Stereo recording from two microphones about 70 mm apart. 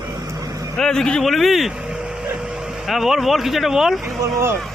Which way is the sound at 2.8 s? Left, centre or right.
Centre.